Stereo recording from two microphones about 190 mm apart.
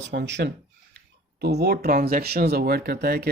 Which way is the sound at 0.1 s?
70° right (ahead or behind).